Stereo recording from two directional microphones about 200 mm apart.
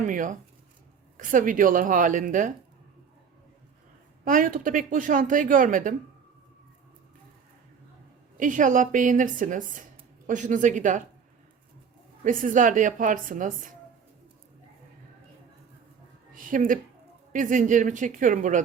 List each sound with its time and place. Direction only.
0.0 s a woman's voice: 40° right (ahead or behind)
4.3 s speech: 45° right (ahead or behind)
8.4 s a woman's voice: 40° right (ahead or behind)
12.2 s a woman's voice: 40° right (ahead or behind)
16.3 s a sound: 40° right (ahead or behind)
17.3 s a woman's voice: 40° right (ahead or behind)